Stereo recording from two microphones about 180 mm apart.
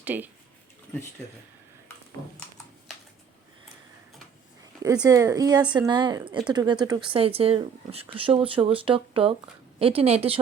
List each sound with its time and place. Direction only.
0.0 s speech: 10° right (ahead or behind)
4.8 s speech: 20° right (ahead or behind)